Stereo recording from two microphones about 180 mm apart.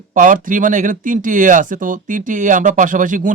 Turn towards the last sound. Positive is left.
turn(degrees=-45)  # may be behind; listen again after turning